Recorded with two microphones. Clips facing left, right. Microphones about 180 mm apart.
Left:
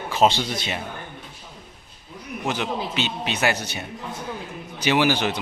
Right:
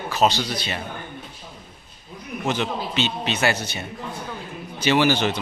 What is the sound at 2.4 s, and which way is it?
A man's voice, 5° left (ahead or behind).